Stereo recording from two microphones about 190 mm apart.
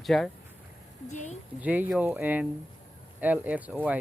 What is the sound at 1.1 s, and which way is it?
Speech, 40° left (ahead or behind).